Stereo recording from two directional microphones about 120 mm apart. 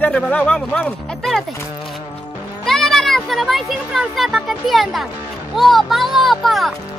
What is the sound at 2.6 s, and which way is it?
Speech, 5° left (ahead or behind).